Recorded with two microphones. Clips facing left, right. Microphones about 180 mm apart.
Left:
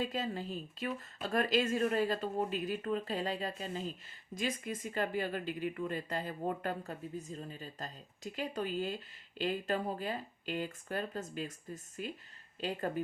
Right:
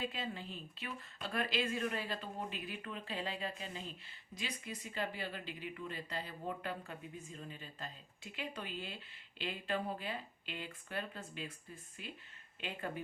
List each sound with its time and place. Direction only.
0.0 s speech: 40° left (ahead or behind)